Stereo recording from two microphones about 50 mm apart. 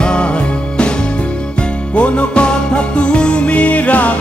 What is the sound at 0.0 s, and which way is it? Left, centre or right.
Music, left.